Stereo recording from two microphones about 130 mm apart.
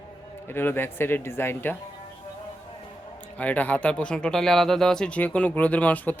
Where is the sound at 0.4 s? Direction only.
15° left (ahead or behind).